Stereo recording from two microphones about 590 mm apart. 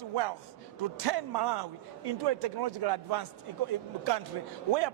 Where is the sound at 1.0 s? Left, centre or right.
Right.